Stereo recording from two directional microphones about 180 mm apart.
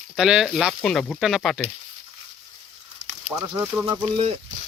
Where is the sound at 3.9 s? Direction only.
30° right (ahead or behind).